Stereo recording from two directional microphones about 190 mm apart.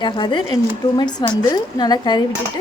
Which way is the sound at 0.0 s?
25° left (ahead or behind).